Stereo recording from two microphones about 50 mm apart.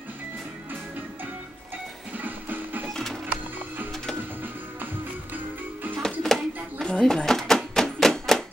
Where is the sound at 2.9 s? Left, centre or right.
Centre.